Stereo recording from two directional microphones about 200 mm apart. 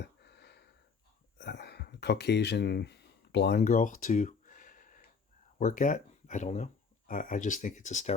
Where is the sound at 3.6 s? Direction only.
40° left (ahead or behind).